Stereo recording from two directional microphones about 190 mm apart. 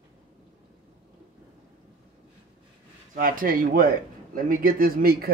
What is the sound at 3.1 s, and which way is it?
Speech, 50° right (ahead or behind).